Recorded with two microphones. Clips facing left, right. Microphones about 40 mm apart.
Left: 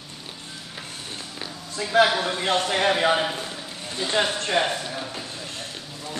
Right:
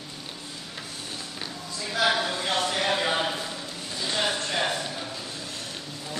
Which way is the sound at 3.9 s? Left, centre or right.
Left.